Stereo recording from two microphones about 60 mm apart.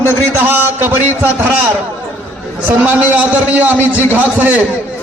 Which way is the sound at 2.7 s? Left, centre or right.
Right.